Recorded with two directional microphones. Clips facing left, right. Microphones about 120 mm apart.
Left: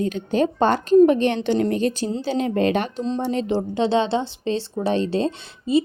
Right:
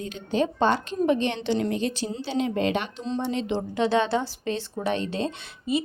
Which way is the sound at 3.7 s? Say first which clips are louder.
Left 2 dB; 25° left (ahead or behind).